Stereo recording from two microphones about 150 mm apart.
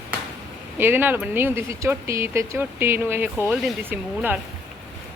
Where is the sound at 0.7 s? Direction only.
15° right (ahead or behind).